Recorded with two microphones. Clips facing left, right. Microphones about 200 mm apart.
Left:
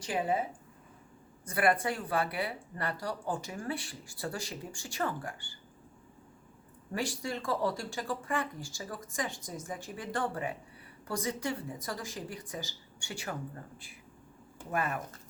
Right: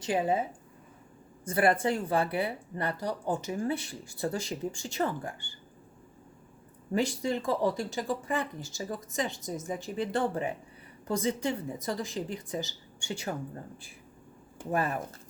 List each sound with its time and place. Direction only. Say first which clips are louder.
0.0 s speech: right 4 dB; 25° right (ahead or behind)
1.5 s speech: right 3 dB; 30° right (ahead or behind)
6.9 s speech: right 6 dB; 20° right (ahead or behind)
14.7 s speech: right 4 dB; 30° right (ahead or behind)